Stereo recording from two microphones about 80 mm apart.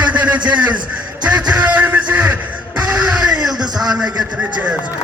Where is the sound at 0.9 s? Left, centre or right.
Centre.